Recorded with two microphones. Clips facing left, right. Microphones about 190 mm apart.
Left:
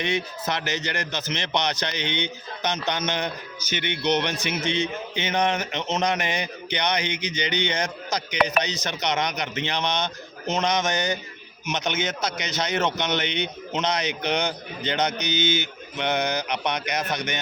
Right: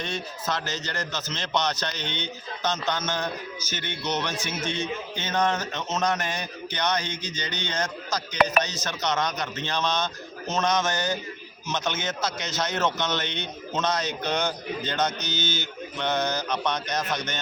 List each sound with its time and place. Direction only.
0.0 s a man's voice: 15° left (ahead or behind)